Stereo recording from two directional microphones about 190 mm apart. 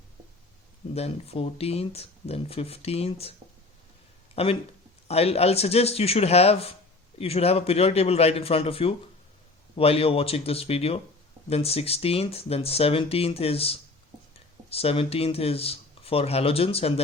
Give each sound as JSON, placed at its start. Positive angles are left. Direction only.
{"t": 0.9, "sound": "speech", "side_deg": 30}
{"t": 4.4, "sound": "speech", "side_deg": 35}